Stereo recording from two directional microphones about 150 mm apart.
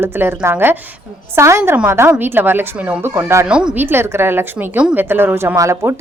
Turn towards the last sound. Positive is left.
turn(degrees=-20)  # may be behind; listen again after turning